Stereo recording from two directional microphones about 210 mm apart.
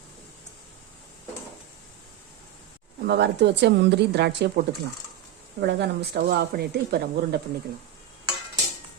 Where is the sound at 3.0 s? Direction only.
50° right (ahead or behind).